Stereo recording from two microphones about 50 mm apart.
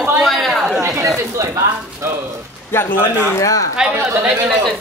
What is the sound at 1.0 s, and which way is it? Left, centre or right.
Chatter, right.